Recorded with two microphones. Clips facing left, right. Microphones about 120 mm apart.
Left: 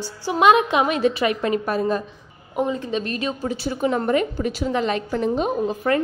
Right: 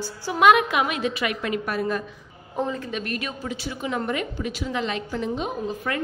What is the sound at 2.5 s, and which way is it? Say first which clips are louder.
A woman's voice: left 4 dB; 15° left (ahead or behind).